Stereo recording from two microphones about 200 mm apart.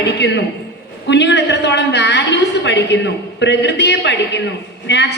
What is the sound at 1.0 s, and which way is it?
A woman's voice, 60° left (ahead or behind).